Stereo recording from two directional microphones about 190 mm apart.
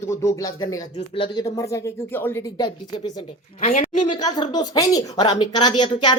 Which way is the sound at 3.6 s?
45° left (ahead or behind).